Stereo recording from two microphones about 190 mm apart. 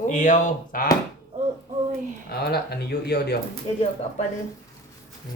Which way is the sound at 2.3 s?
55° left (ahead or behind).